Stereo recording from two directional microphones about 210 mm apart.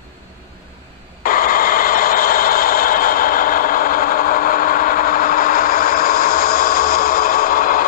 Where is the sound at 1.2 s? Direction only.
40° left (ahead or behind).